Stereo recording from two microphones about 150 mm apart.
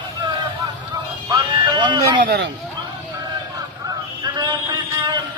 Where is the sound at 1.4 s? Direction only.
30° right (ahead or behind).